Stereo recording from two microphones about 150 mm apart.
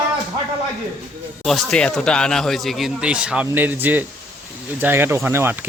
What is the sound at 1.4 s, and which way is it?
Speech, 5° left (ahead or behind).